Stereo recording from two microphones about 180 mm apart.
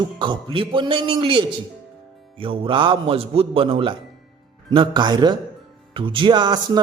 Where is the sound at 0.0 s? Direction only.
25° right (ahead or behind).